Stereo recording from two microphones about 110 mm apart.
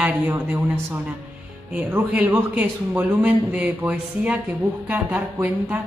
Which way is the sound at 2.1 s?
15° right (ahead or behind).